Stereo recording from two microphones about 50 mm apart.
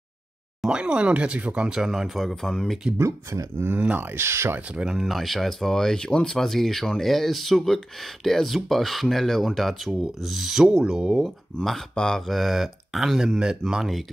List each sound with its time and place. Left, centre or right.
0.7 s speech: centre
1.8 s speech: centre
3.0 s speech: right
4.9 s speech: centre
11.9 s mantra: centre
12.3 s speech: centre
13.4 s speech: centre